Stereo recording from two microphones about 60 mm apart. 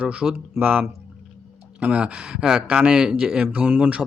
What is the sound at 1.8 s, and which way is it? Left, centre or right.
A man's voice, centre.